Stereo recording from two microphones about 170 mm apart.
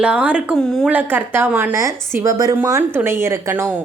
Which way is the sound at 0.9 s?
10° right (ahead or behind).